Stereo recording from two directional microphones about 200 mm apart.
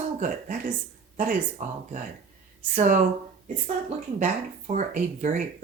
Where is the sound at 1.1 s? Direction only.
40° right (ahead or behind).